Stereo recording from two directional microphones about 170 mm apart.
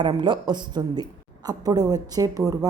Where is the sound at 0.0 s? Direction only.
25° right (ahead or behind).